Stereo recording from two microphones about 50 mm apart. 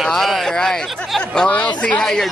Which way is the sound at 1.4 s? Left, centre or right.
Left.